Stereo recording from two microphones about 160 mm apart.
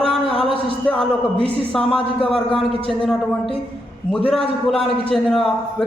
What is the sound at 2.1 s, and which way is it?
Speech, 35° left (ahead or behind).